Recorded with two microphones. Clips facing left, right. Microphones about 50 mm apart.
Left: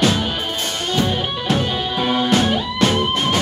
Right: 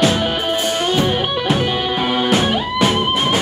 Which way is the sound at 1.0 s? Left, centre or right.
Centre.